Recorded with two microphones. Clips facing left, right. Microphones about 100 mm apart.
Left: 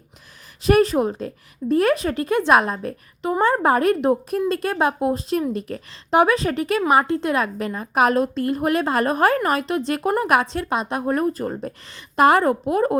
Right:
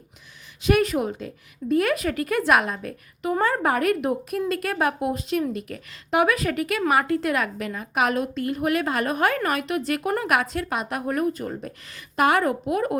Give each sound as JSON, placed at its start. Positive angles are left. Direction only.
{"t": 0.6, "sound": "a woman's voice", "side_deg": 35}